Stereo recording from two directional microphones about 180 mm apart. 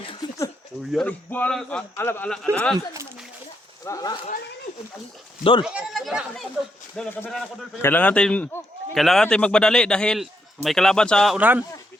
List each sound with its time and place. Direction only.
0.8 s a man's voice: centre (ahead or behind)
2.7 s speech: 20° right (ahead or behind)
3.8 s speech: 20° left (ahead or behind)
5.4 s speech: 30° left (ahead or behind)
5.6 s a man's voice: 5° right (ahead or behind)
11.3 s speech: 10° right (ahead or behind)